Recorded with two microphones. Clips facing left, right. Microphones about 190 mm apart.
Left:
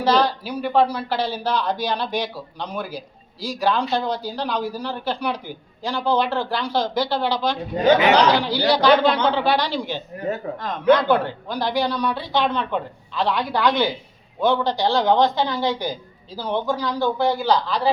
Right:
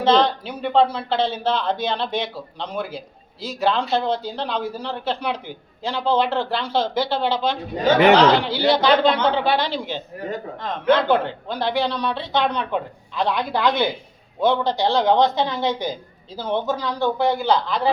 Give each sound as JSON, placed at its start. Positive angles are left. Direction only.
{"t": 0.0, "sound": "a man's voice", "side_deg": -25}
{"t": 7.9, "sound": "speech", "side_deg": -60}
{"t": 8.5, "sound": "a man's voice", "side_deg": -20}
{"t": 11.1, "sound": "a man's voice", "side_deg": -25}